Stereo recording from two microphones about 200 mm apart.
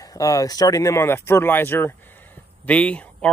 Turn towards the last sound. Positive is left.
turn(degrees=5)  # may be behind; listen again after turning